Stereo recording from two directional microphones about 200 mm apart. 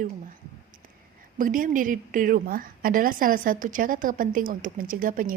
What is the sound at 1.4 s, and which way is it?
A woman's voice, 45° right (ahead or behind).